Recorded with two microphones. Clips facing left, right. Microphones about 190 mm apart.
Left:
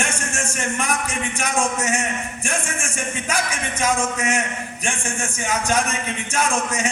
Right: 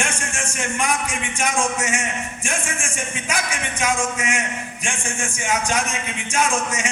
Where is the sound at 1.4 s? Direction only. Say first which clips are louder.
Right 1 dB; 40° left (ahead or behind).